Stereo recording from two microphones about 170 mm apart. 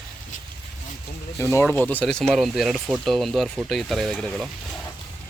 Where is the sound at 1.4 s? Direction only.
15° left (ahead or behind).